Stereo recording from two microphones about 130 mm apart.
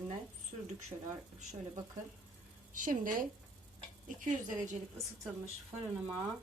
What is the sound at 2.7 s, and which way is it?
Speech, 90° right.